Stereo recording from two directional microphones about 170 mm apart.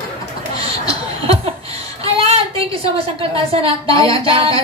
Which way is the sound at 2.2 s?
35° right (ahead or behind).